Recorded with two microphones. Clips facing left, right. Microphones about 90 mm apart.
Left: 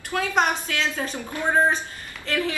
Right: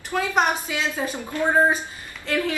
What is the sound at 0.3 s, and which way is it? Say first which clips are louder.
A woman's voice: even; 5° right (ahead or behind).